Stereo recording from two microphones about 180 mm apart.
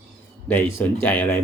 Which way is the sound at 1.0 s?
10° left (ahead or behind).